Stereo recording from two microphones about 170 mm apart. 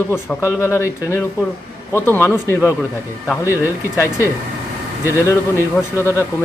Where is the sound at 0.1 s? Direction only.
15° left (ahead or behind).